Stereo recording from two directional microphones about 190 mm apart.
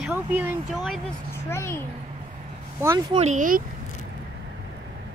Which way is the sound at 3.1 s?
40° right (ahead or behind).